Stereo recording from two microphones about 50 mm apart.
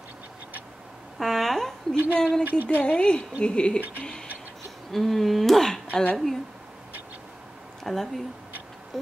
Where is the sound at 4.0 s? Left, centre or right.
Centre.